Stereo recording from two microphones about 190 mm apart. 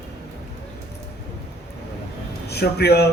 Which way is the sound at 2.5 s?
60° left (ahead or behind).